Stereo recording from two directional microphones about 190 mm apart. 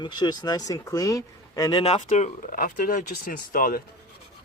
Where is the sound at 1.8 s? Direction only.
35° left (ahead or behind).